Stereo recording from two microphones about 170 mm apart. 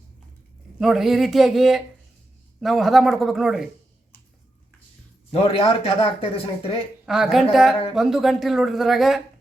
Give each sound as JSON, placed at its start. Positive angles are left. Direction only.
{"t": 0.8, "sound": "speech", "side_deg": 0}
{"t": 5.3, "sound": "speech", "side_deg": 35}
{"t": 7.0, "sound": "a woman's voice", "side_deg": -5}